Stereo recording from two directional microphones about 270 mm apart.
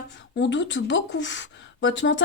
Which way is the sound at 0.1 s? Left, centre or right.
Left.